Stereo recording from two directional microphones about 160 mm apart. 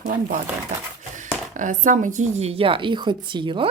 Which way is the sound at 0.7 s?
45° right (ahead or behind).